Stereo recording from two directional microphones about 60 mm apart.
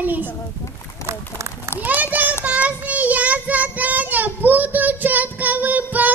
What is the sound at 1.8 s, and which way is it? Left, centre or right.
Speech, right.